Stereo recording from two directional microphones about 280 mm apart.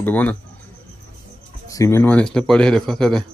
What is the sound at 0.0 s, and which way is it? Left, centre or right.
Speech, centre.